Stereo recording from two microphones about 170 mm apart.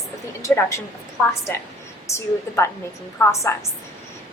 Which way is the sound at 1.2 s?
5° left (ahead or behind).